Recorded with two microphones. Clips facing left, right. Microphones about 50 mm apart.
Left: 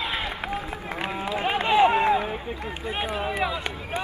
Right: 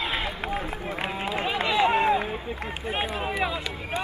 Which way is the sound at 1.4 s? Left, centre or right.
Left.